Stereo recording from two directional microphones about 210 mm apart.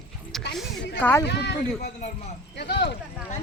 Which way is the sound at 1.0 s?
10° left (ahead or behind).